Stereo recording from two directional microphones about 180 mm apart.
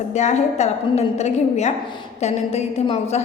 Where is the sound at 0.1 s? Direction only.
40° left (ahead or behind).